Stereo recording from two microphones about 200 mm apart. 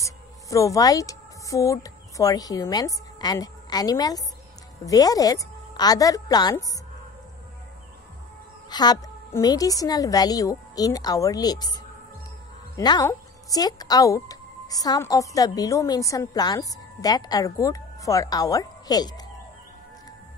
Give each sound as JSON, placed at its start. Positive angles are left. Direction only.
{"t": 0.0, "sound": "a woman's voice", "side_deg": 15}
{"t": 8.6, "sound": "a woman's voice", "side_deg": 20}